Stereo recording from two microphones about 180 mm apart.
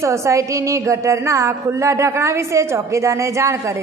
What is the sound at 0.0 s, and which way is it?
A woman's voice, 15° right (ahead or behind).